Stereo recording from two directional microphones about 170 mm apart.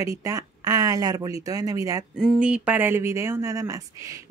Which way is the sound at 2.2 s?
5° right (ahead or behind).